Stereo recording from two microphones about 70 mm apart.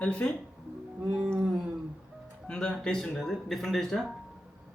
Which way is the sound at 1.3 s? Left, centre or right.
Centre.